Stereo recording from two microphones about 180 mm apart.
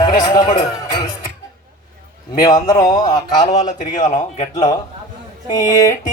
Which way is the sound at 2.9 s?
45° left (ahead or behind).